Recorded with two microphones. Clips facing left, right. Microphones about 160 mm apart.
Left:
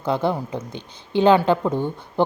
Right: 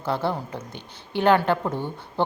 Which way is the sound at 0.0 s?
15° left (ahead or behind).